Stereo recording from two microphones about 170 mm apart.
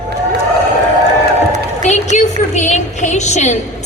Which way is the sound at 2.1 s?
45° left (ahead or behind).